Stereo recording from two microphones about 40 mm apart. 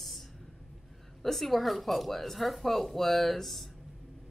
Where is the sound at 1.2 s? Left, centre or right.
Centre.